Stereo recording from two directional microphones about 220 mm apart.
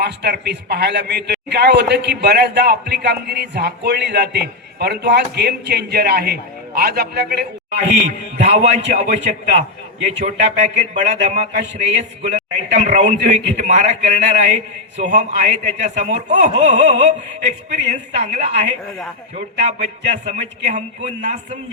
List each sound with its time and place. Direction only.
0.0 s a man's voice: 50° right (ahead or behind)
8.4 s a man's voice: 30° right (ahead or behind)